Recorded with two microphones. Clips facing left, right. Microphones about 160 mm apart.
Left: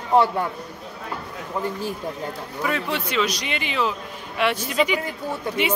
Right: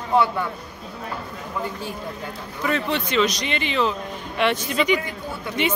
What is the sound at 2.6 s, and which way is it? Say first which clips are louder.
Speech: right 2 dB; 5° left (ahead or behind).